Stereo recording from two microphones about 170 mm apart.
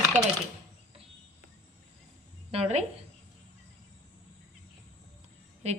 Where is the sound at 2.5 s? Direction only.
40° right (ahead or behind).